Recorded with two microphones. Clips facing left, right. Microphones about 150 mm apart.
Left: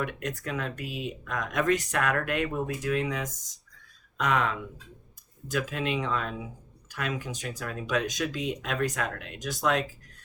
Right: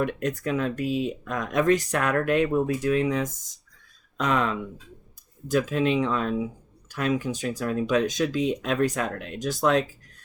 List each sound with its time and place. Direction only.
0.0 s speech: 30° right (ahead or behind)